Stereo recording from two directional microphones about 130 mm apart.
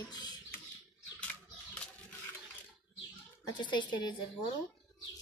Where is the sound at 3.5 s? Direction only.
35° left (ahead or behind).